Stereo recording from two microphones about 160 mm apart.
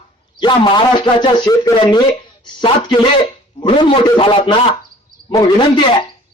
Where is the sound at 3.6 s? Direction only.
30° left (ahead or behind).